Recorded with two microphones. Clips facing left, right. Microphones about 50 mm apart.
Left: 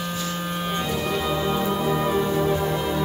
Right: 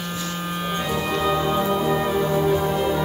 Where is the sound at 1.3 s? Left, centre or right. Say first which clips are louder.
Right 4 dB; centre.